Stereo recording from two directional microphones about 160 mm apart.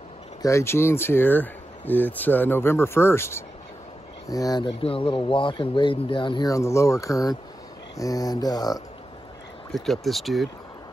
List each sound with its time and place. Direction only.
0.4 s speech: 20° left (ahead or behind)
9.7 s speech: centre (ahead or behind)